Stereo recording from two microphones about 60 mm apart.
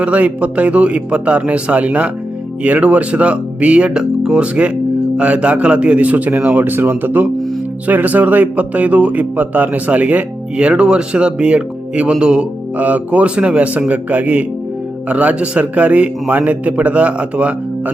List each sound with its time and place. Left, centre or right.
0.0 s speech: right